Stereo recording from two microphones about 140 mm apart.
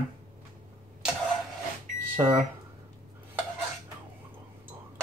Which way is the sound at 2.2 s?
20° right (ahead or behind).